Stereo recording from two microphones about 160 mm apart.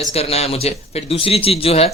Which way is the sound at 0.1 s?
40° left (ahead or behind).